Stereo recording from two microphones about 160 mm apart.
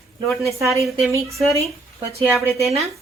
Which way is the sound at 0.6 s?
20° right (ahead or behind).